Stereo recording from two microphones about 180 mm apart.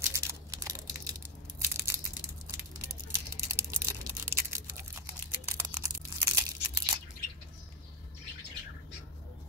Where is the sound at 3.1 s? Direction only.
15° right (ahead or behind).